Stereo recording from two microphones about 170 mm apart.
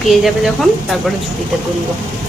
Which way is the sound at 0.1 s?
Centre (ahead or behind).